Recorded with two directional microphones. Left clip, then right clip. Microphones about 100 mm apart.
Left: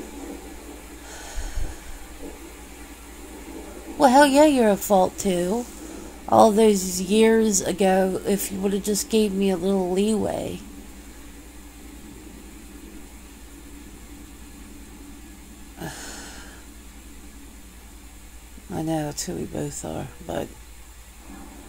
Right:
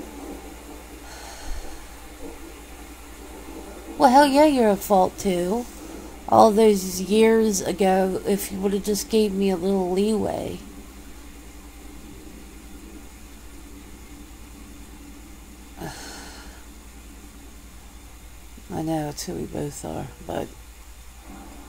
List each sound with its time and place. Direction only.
1.1 s snort: 20° left (ahead or behind)
4.0 s a woman's voice: 20° left (ahead or behind)
15.8 s a sound: 20° left (ahead or behind)
18.7 s speech: 20° left (ahead or behind)